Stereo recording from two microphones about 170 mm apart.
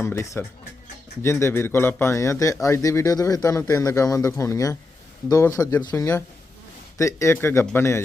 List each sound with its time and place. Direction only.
0.0 s speech: 15° left (ahead or behind)